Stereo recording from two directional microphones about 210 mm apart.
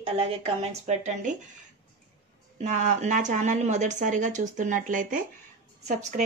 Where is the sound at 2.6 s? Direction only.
35° right (ahead or behind).